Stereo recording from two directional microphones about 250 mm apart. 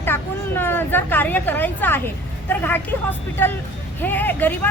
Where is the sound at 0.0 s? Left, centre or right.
Centre.